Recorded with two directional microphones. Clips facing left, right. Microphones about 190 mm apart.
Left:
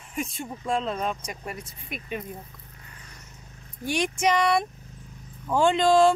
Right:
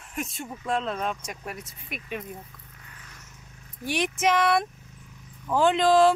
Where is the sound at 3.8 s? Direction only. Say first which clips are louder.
Even; centre (ahead or behind).